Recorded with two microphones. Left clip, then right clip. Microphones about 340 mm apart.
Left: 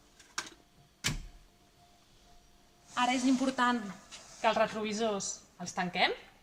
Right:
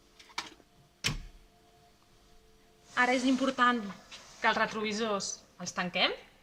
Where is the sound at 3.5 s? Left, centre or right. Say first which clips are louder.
Right 3 dB; centre.